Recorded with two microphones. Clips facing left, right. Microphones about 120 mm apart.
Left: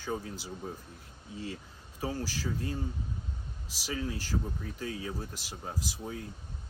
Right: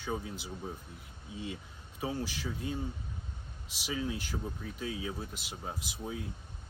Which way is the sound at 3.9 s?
10° right (ahead or behind).